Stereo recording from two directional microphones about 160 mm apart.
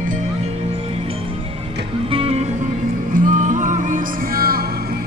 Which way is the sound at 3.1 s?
50° right (ahead or behind).